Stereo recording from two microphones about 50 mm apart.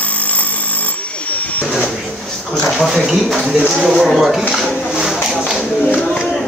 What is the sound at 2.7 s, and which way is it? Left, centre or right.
Speech, centre.